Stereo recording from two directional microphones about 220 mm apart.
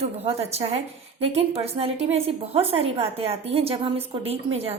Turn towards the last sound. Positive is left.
turn(degrees=-30)  # may be behind; listen again after turning